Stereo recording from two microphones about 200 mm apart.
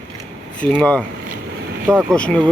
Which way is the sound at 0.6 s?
5° left (ahead or behind).